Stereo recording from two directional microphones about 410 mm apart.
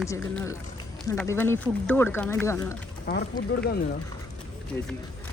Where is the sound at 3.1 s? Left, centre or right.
Left.